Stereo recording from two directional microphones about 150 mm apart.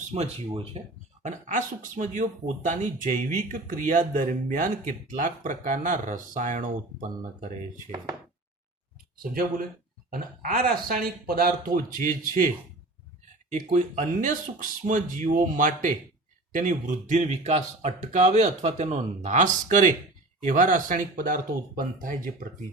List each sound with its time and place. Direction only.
0.1 s speech: 40° right (ahead or behind)
1.2 s speech: 55° right (ahead or behind)
10.1 s speech: 75° right (ahead or behind)
13.5 s speech: 55° right (ahead or behind)